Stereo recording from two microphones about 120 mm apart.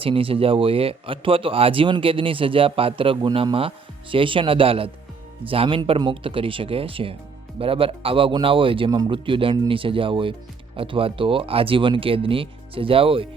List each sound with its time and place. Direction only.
0.0 s speech: 50° right (ahead or behind)